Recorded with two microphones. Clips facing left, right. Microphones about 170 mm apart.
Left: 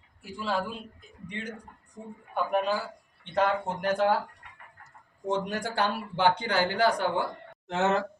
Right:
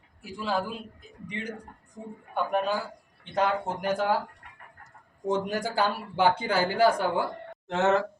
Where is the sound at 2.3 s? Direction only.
Centre (ahead or behind).